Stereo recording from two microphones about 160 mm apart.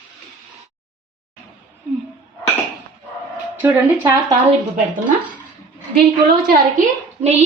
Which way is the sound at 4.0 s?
20° right (ahead or behind).